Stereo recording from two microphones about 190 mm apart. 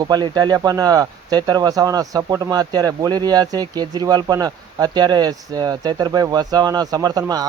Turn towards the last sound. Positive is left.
turn(degrees=-20)  # may be behind; listen again after turning